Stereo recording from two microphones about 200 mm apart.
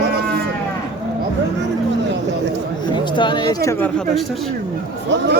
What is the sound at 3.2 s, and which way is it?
Speech, 25° left (ahead or behind).